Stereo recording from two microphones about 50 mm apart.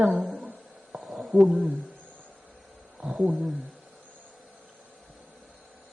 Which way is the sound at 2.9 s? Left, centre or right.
Centre.